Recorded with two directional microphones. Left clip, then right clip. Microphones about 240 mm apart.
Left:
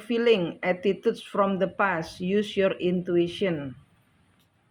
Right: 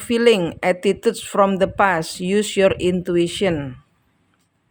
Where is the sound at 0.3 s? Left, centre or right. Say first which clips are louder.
Right 7 dB; right.